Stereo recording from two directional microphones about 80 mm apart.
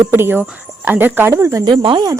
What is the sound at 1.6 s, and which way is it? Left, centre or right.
Speech, right.